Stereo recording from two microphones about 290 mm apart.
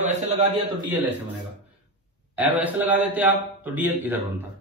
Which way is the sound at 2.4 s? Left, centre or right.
Centre.